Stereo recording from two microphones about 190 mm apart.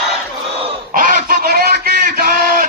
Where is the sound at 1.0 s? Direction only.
45° right (ahead or behind).